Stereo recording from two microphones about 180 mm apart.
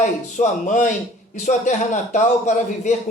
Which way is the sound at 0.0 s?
45° left (ahead or behind).